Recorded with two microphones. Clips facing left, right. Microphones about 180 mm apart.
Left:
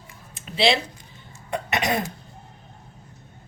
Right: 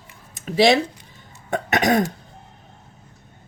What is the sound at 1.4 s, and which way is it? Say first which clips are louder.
Cough: right 5 dB; 45° right (ahead or behind).